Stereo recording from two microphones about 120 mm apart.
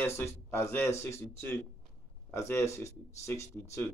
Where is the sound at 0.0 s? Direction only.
20° left (ahead or behind).